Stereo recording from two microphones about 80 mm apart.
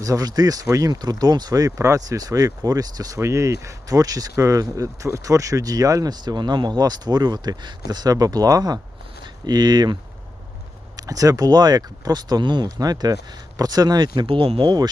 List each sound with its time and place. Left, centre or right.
0.0 s speech: right
3.2 s speech: right
10.9 s speech: right
12.8 s speech: right